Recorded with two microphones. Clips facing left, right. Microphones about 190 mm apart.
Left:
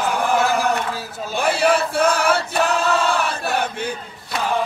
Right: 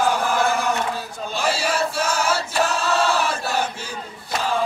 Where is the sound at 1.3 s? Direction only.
55° left (ahead or behind).